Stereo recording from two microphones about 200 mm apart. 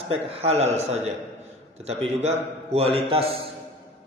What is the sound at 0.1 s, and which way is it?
Speech, 30° right (ahead or behind).